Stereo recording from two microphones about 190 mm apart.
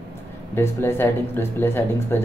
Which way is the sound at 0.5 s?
10° left (ahead or behind).